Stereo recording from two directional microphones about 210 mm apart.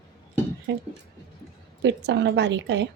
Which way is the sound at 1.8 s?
55° right (ahead or behind).